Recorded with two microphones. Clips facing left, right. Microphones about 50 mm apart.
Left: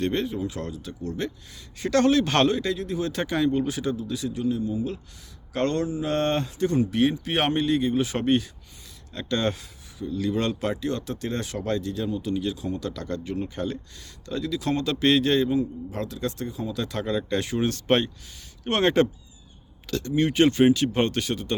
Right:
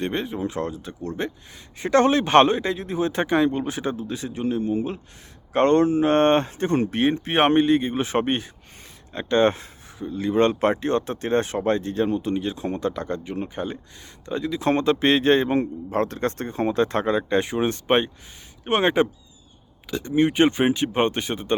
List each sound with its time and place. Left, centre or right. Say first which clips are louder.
0.0 s speech: even; right
5.5 s speech: right 8 dB; right
12.9 s speech: right 2 dB; right
15.9 s speech: right 6 dB; right